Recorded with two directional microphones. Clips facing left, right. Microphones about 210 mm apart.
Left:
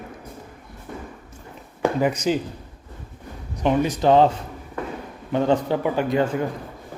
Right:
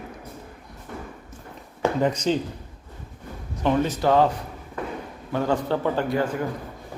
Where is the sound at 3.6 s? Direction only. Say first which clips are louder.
Left 2 dB; 15° left (ahead or behind).